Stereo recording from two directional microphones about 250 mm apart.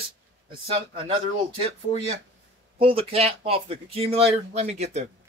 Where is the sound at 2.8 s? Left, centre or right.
Right.